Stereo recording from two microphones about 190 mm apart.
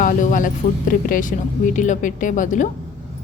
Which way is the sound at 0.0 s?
45° left (ahead or behind).